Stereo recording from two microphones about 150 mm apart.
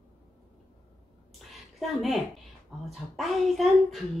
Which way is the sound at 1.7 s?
Centre (ahead or behind).